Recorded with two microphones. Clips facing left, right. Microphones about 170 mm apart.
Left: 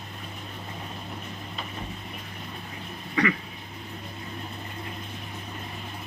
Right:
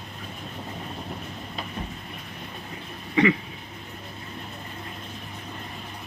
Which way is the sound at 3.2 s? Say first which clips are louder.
Right 5 dB; 25° right (ahead or behind).